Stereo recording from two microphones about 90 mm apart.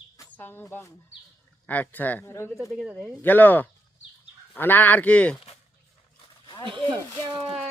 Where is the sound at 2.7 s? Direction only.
10° right (ahead or behind).